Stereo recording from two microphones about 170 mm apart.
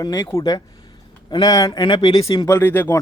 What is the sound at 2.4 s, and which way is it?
Speech, 10° left (ahead or behind).